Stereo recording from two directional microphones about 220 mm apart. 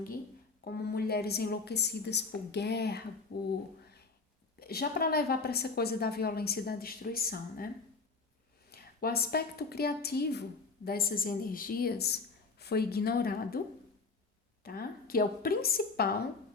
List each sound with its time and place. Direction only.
0.6 s a woman's voice: 45° left (ahead or behind)
4.6 s a woman's voice: 45° left (ahead or behind)
8.7 s a woman's voice: 45° left (ahead or behind)
14.6 s a woman's voice: 45° left (ahead or behind)